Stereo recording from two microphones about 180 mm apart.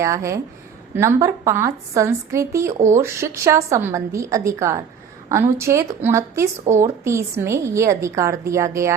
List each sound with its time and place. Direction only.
0.0 s speech: 15° right (ahead or behind)